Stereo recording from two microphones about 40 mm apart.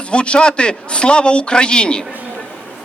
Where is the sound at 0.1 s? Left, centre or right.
Left.